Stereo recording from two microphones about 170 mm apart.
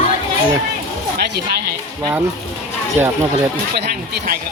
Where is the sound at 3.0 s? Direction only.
10° right (ahead or behind).